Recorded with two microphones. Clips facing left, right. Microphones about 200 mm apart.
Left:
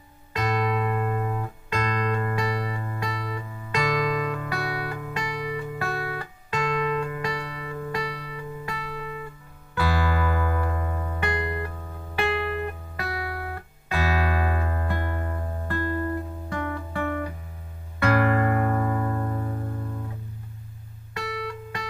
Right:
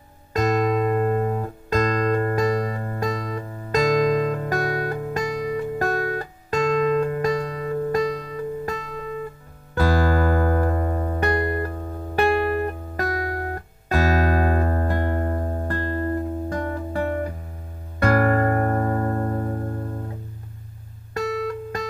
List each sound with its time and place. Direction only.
0.3 s music: 45° right (ahead or behind)
21.1 s music: 45° right (ahead or behind)